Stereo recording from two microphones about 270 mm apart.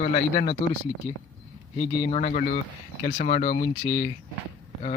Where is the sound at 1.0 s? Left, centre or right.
Centre.